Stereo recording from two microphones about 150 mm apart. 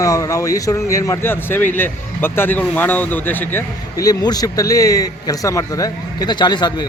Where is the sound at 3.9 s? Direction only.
25° left (ahead or behind).